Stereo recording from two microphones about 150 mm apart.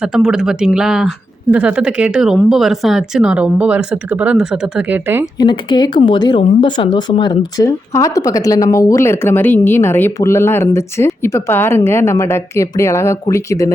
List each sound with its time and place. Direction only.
0.0 s speech: 5° right (ahead or behind)
5.4 s speech: 30° left (ahead or behind)